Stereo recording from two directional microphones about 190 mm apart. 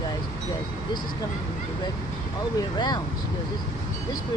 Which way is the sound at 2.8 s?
25° left (ahead or behind).